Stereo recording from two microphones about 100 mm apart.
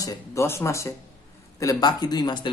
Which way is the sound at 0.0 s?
30° left (ahead or behind).